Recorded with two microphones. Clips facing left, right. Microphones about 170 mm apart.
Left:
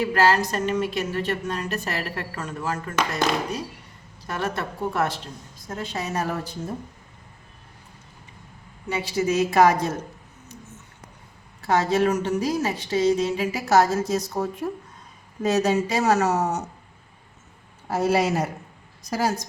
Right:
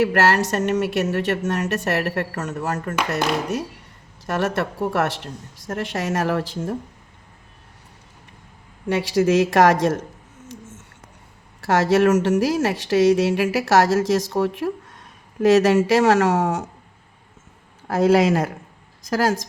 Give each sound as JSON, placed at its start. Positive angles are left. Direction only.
{"t": 0.0, "sound": "speech", "side_deg": -75}
{"t": 4.3, "sound": "a woman's voice", "side_deg": -75}
{"t": 8.9, "sound": "a woman's voice", "side_deg": -85}
{"t": 10.5, "sound": "a sound", "side_deg": -90}
{"t": 11.6, "sound": "a woman's voice", "side_deg": -85}
{"t": 17.8, "sound": "a woman's voice", "side_deg": -90}